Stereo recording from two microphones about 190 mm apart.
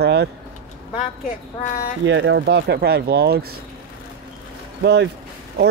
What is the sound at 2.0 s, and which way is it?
Speech, 70° right (ahead or behind).